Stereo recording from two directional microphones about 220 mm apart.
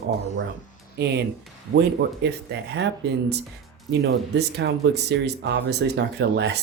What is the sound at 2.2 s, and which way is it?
Speech, 50° right (ahead or behind).